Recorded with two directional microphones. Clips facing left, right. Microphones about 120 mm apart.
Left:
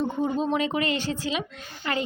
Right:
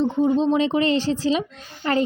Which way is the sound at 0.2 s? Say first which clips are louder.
Right 7 dB; 25° right (ahead or behind).